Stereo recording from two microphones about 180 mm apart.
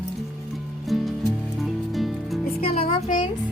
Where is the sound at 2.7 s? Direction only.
40° left (ahead or behind).